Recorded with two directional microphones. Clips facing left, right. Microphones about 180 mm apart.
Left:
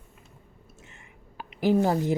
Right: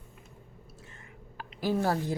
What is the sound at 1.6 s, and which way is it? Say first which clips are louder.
Speech: left 6 dB; 15° left (ahead or behind).